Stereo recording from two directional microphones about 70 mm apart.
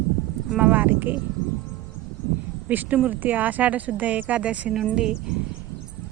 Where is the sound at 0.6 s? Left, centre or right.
Centre.